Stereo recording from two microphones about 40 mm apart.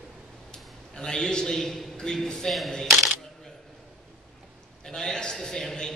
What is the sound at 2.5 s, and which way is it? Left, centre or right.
Speech, centre.